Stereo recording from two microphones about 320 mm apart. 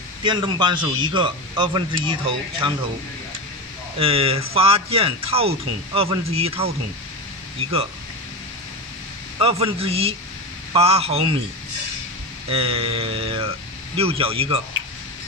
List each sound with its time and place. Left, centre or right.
0.2 s speech: centre
4.0 s speech: centre
9.4 s a man's voice: centre
12.4 s speech: centre